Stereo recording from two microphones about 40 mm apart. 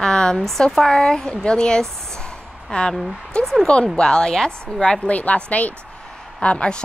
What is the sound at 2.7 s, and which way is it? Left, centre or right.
Speech, left.